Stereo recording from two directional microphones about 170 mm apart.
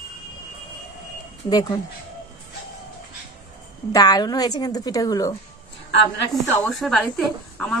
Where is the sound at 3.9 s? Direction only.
20° left (ahead or behind).